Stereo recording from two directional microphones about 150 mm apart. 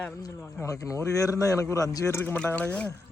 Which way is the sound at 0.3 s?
20° left (ahead or behind).